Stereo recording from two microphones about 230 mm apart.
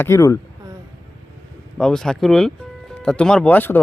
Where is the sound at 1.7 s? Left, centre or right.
Centre.